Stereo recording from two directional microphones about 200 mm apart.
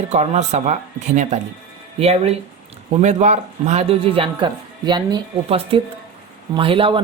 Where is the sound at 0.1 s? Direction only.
35° right (ahead or behind).